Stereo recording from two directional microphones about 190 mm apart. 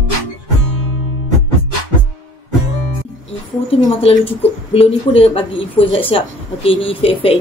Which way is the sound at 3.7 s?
30° left (ahead or behind).